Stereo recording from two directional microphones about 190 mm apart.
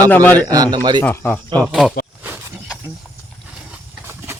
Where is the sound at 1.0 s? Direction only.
10° left (ahead or behind).